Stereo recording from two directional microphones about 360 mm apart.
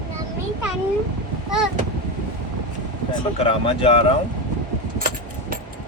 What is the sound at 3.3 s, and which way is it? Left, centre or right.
Speech, centre.